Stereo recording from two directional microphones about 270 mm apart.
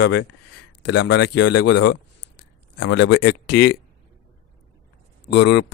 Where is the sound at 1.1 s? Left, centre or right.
Left.